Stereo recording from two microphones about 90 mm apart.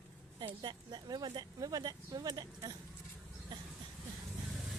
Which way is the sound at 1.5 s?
45° right (ahead or behind).